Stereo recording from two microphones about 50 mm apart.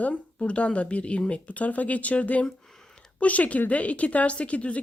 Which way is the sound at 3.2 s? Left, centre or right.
Left.